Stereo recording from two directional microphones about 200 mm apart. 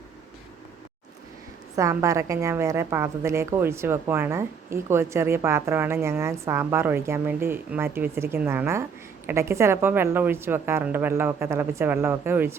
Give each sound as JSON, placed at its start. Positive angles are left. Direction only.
{"t": 1.7, "sound": "a woman's voice", "side_deg": -15}